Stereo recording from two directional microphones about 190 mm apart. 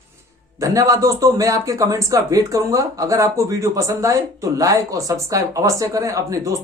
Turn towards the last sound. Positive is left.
turn(degrees=-15)  # may be behind; listen again after turning